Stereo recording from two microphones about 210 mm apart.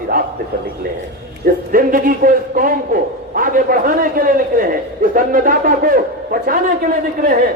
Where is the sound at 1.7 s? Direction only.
40° right (ahead or behind).